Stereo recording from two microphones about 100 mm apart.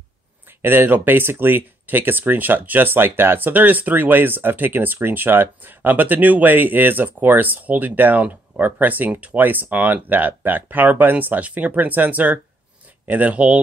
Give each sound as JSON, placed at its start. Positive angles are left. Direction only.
{"t": 0.6, "sound": "speech", "side_deg": -20}